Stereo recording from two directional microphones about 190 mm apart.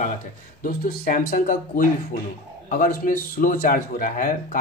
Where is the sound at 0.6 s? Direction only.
50° left (ahead or behind).